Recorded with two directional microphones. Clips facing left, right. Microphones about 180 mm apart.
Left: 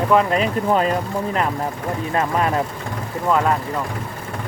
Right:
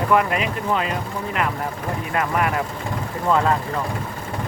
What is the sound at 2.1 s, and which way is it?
Speech, 25° left (ahead or behind).